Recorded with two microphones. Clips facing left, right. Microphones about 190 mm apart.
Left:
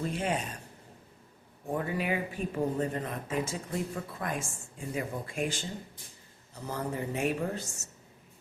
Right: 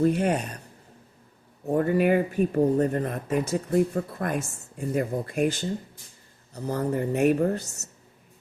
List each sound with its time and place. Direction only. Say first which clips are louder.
0.0 s speech: right 9 dB; 65° right (ahead or behind)
1.6 s speech: right 10 dB; 45° right (ahead or behind); by 4.5 s 65° right (ahead or behind)
4.8 s speech: right 8 dB; 50° right (ahead or behind)
6.5 s speech: right 8 dB; 45° right (ahead or behind); by 7.9 s 65° right (ahead or behind)